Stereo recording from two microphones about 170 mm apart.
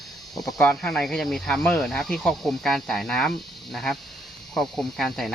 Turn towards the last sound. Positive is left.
turn(degrees=5)  # may be behind; listen again after turning